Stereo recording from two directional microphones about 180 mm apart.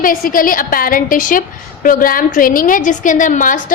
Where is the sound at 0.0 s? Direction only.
50° left (ahead or behind).